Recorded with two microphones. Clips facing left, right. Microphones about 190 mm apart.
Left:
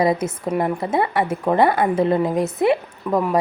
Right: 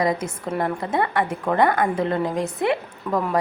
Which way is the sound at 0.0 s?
25° left (ahead or behind).